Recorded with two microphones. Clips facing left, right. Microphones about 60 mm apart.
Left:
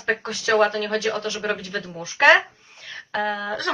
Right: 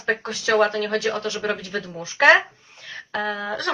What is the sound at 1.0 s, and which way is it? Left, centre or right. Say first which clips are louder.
Speech: even; right.